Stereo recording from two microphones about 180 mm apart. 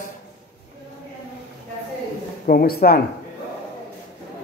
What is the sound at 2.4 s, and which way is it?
Speech, 55° left (ahead or behind).